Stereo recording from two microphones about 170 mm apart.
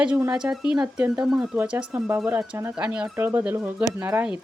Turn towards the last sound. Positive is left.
turn(degrees=-10)  # may be behind; listen again after turning